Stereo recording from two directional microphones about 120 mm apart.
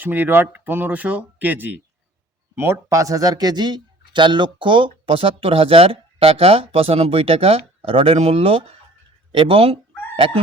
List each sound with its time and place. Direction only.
0.0 s speech: 15° right (ahead or behind); by 10.4 s 50° right (ahead or behind)